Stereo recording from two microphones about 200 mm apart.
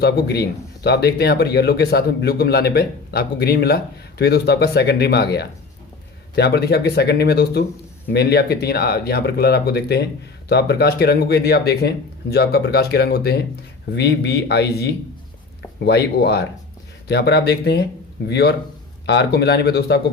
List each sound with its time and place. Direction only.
0.0 s speech: 55° left (ahead or behind)